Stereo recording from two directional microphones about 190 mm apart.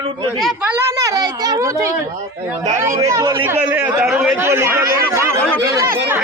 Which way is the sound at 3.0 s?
15° right (ahead or behind).